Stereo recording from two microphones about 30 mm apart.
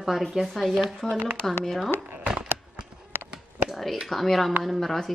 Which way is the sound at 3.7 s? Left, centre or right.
Centre.